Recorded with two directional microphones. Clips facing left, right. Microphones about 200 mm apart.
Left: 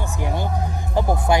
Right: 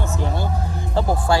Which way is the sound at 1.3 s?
20° left (ahead or behind).